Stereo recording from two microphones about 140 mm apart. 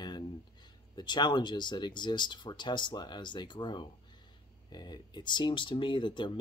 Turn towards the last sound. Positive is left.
turn(degrees=35)  # may be behind; listen again after turning